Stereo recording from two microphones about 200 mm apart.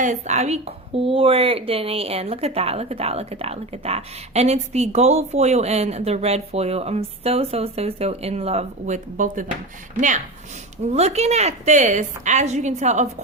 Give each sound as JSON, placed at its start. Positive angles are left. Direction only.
{"t": 0.0, "sound": "a woman's voice", "side_deg": -35}